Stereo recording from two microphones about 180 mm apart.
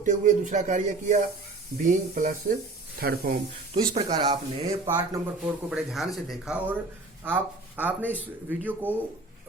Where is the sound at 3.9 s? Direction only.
25° right (ahead or behind).